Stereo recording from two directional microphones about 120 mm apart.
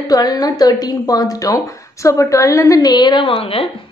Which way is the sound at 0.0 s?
35° left (ahead or behind).